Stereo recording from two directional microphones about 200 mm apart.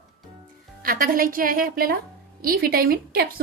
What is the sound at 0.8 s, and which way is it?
A woman's voice, 45° right (ahead or behind).